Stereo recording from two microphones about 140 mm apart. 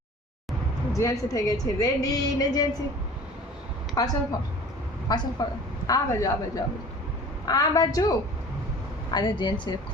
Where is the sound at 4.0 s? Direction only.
25° left (ahead or behind).